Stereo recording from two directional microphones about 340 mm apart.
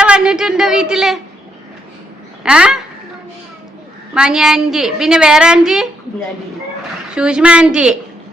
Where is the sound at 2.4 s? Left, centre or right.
Centre.